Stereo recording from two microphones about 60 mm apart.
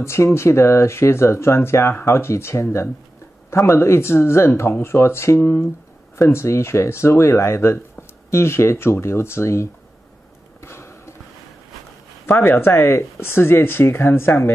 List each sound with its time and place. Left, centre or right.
0.0 s speech: left
10.6 s a sound: left
12.3 s speech: left